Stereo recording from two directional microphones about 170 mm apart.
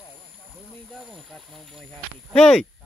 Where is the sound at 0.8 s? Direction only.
Centre (ahead or behind).